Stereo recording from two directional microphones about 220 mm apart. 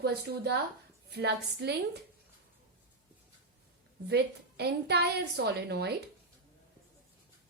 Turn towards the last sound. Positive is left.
turn(degrees=-50)  # may be behind; listen again after turning